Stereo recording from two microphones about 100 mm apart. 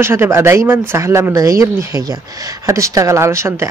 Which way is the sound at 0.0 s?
25° right (ahead or behind).